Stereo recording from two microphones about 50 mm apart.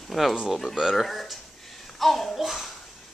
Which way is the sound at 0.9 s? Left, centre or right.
Centre.